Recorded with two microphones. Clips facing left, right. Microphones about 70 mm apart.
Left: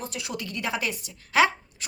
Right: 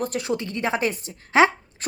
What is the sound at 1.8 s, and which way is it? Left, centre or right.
Dog, right.